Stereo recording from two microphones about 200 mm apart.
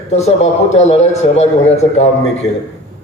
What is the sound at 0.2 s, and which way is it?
A man's voice, 35° left (ahead or behind).